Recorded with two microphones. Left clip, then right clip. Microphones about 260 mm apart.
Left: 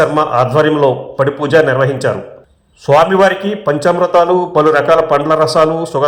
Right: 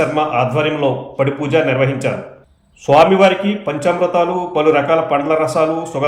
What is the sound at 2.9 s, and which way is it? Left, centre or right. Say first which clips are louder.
A man's voice: left 1 dB; left.